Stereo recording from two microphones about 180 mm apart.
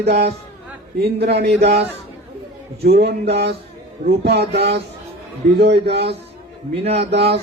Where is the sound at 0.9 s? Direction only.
60° right (ahead or behind).